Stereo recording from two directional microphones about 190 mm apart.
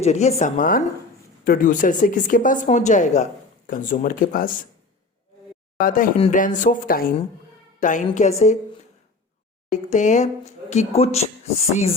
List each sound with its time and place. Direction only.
0.0 s speech: 35° left (ahead or behind)
5.8 s speech: 45° left (ahead or behind)
9.6 s speech: 40° left (ahead or behind)